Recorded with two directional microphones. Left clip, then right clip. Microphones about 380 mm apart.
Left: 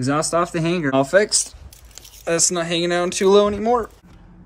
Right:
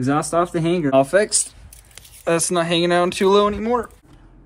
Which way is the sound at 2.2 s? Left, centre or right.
Centre.